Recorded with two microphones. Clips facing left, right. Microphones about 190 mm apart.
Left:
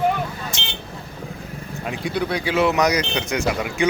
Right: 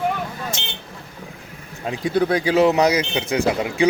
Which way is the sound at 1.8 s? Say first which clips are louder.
Right 3 dB; 25° right (ahead or behind).